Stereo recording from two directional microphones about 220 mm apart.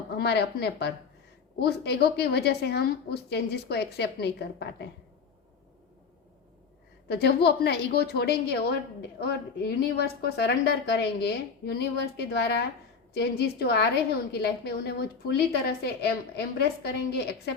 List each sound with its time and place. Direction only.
0.2 s a woman's voice: 50° left (ahead or behind)
7.1 s a woman's voice: 50° left (ahead or behind)